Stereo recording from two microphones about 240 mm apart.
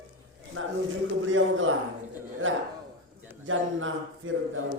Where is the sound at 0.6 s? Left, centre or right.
Right.